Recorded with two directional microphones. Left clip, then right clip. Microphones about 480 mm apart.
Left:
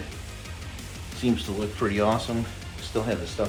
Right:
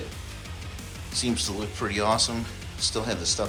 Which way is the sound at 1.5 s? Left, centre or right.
Centre.